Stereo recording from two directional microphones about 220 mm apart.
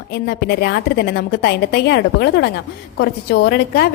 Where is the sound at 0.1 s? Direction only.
50° left (ahead or behind).